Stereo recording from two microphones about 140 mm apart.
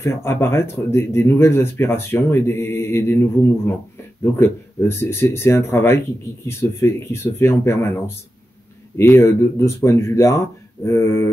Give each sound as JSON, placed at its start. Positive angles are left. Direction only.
{"t": 0.0, "sound": "speech", "side_deg": 20}